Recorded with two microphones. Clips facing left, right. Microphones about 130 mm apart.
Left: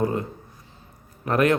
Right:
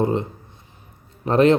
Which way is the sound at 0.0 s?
25° right (ahead or behind).